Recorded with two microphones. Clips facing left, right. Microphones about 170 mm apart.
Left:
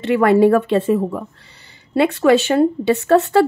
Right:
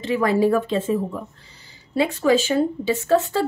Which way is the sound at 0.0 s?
65° left (ahead or behind).